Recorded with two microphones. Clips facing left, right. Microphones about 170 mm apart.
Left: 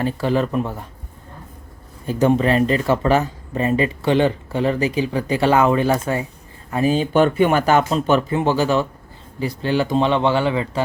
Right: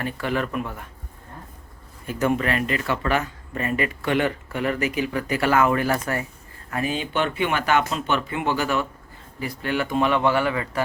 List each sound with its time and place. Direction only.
0.0 s speech: 30° left (ahead or behind)
2.0 s speech: 30° left (ahead or behind)